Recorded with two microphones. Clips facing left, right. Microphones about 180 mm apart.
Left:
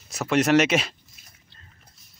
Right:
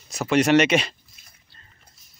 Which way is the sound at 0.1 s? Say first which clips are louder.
Right 2 dB; centre (ahead or behind).